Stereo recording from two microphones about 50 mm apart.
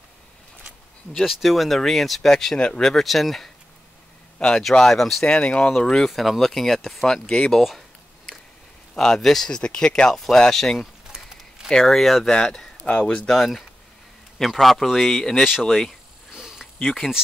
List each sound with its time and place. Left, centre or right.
1.1 s speech: centre
4.4 s speech: centre
5.2 s speech: centre
6.0 s speech: centre
8.9 s speech: centre
9.5 s speech: centre
10.1 s speech: centre
11.1 s a sound: centre
11.8 s speech: centre
12.8 s speech: left
13.3 s speech: centre
16.3 s a sound: centre
16.8 s speech: centre